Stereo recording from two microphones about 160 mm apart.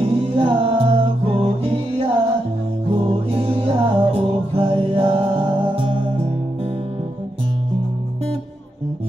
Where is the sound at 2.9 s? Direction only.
35° right (ahead or behind).